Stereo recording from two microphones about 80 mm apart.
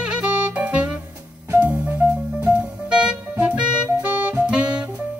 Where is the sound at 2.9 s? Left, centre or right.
Centre.